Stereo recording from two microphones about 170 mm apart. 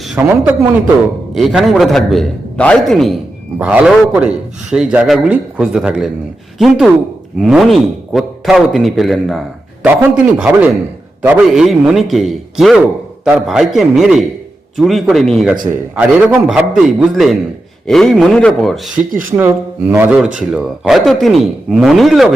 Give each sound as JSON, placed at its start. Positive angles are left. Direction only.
{"t": 0.2, "sound": "a man's voice", "side_deg": -10}
{"t": 15.7, "sound": "speech", "side_deg": -10}
{"t": 19.4, "sound": "speech", "side_deg": -15}